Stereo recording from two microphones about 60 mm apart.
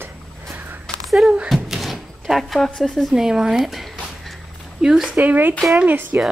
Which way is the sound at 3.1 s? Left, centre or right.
Centre.